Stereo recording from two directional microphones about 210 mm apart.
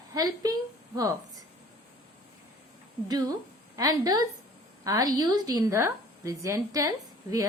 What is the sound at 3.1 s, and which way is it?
A woman's voice, 20° right (ahead or behind).